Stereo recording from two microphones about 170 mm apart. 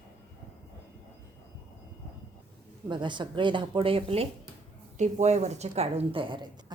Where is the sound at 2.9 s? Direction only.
25° right (ahead or behind).